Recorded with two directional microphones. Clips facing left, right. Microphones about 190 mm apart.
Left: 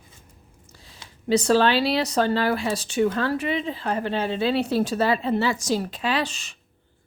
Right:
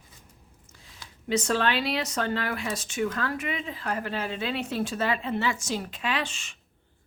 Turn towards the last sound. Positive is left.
turn(degrees=35)  # may be behind; listen again after turning